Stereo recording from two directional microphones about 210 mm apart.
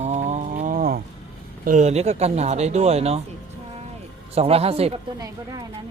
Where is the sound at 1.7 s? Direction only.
35° right (ahead or behind).